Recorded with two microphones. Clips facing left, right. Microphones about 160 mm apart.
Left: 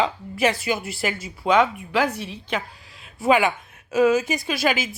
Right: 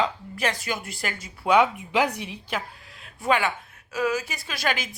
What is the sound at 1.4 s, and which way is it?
Speech, 10° right (ahead or behind).